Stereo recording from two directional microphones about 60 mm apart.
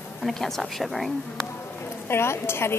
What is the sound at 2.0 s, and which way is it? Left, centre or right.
Speech, left.